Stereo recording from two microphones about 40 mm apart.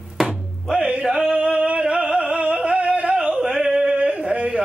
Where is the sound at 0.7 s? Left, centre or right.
Right.